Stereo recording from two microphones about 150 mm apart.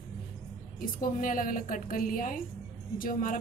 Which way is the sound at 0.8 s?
65° left (ahead or behind).